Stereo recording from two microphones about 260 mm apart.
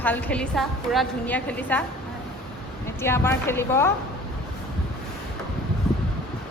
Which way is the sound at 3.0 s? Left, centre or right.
Centre.